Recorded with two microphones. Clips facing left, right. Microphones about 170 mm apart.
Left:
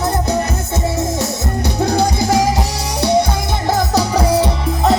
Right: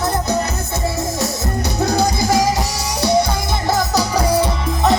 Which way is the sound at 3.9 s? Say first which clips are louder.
Left 3 dB; 25° left (ahead or behind).